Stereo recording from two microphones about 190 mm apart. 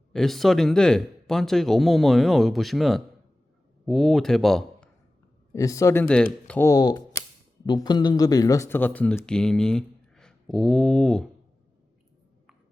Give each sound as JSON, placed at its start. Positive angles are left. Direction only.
{"t": 0.1, "sound": "speech", "side_deg": 0}
{"t": 5.5, "sound": "speech", "side_deg": 15}